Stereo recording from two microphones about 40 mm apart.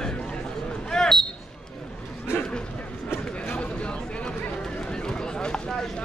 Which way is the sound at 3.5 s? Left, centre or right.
Left.